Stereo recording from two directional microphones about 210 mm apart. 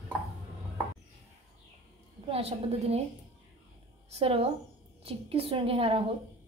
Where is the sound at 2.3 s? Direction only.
30° right (ahead or behind).